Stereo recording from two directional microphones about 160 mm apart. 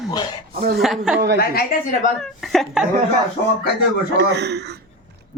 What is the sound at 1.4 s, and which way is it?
Speech, 65° left (ahead or behind).